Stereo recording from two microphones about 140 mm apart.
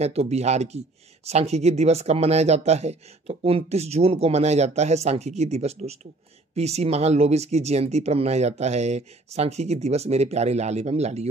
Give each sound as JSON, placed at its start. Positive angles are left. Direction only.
{"t": 0.0, "sound": "speech", "side_deg": -50}